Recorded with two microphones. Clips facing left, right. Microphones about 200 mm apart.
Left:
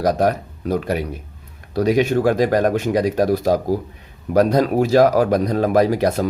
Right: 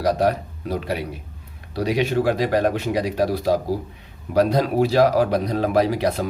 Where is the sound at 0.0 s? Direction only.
45° left (ahead or behind).